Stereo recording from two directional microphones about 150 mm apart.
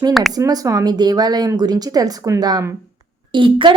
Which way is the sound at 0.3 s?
25° right (ahead or behind).